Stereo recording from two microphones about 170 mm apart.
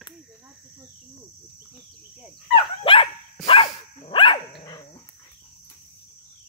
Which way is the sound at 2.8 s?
30° left (ahead or behind).